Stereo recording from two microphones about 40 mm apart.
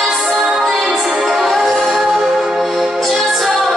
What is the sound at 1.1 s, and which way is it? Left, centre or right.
Music, centre.